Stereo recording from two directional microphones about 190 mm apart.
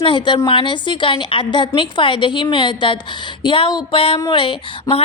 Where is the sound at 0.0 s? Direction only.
25° left (ahead or behind).